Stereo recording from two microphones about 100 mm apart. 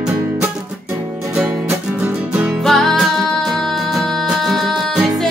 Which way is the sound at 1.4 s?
25° right (ahead or behind).